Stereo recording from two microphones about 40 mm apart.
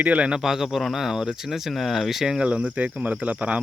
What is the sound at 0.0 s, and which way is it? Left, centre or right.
Speech, right.